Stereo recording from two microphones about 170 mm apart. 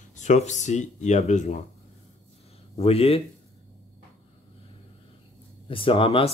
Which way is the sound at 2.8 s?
35° left (ahead or behind).